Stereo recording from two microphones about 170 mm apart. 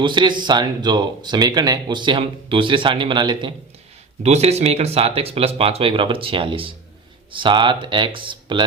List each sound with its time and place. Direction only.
0.0 s speech: 25° right (ahead or behind)
4.2 s speech: 40° right (ahead or behind)